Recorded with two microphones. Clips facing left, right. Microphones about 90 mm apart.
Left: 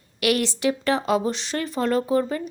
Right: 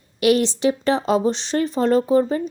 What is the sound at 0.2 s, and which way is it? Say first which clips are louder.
Speech: right 5 dB; 25° right (ahead or behind).